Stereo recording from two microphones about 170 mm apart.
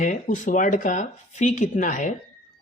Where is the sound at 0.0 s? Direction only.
50° left (ahead or behind).